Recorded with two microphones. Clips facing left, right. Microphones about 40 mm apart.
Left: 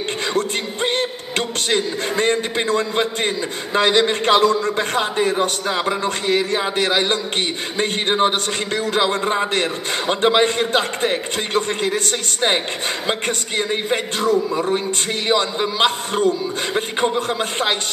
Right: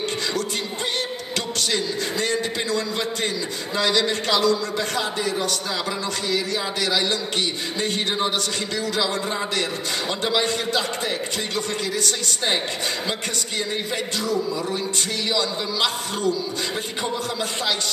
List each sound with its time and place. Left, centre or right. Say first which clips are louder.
0.3 s music: left 5 dB; left
1.7 s a man's voice: left 6 dB; left
13.6 s a man's voice: left 6 dB; left